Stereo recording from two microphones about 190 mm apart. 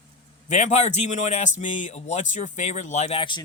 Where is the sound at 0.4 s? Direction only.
35° left (ahead or behind).